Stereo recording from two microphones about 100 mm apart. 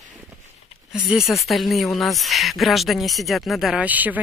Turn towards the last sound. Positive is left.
turn(degrees=-15)  # may be behind; listen again after turning